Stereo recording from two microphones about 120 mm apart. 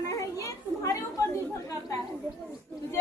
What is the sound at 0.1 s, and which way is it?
Children playing, 25° left (ahead or behind).